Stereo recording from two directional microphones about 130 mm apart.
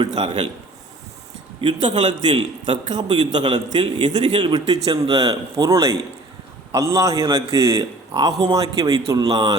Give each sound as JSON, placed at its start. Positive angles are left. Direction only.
{"t": 0.2, "sound": "a man's voice", "side_deg": -35}
{"t": 1.6, "sound": "a man's voice", "side_deg": -35}